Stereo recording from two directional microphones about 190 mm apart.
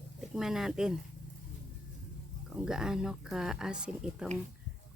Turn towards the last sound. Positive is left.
turn(degrees=-5)  # may be behind; listen again after turning